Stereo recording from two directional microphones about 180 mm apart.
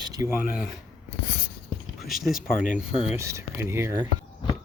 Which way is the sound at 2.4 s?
45° left (ahead or behind).